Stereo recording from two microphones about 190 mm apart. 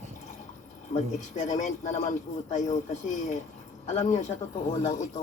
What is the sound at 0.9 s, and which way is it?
A man's voice, 40° left (ahead or behind).